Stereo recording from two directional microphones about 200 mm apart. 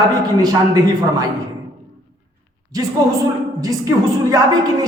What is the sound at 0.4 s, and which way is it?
Speech, 20° right (ahead or behind).